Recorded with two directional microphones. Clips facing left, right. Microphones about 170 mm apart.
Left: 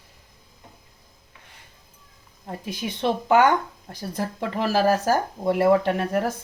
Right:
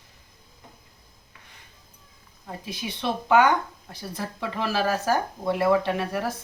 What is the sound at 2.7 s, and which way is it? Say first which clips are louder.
Speech: left 4 dB; 50° left (ahead or behind).